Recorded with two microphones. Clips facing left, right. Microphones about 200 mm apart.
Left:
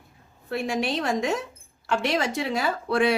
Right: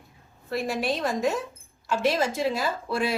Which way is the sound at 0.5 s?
70° left (ahead or behind).